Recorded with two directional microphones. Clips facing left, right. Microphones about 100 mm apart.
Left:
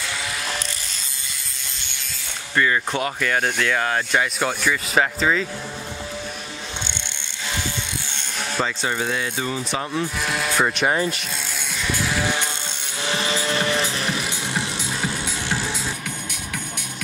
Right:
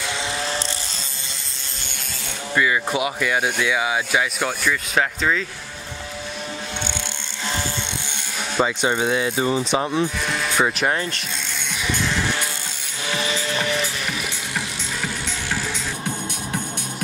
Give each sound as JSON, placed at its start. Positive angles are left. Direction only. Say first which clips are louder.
{"t": 2.5, "sound": "speech", "louder": "even", "side_deg": -10}
{"t": 8.6, "sound": "speech", "louder": "right 4 dB", "side_deg": -20}
{"t": 10.2, "sound": "speech", "louder": "even", "side_deg": 5}
{"t": 13.0, "sound": "music", "louder": "left 1 dB", "side_deg": 30}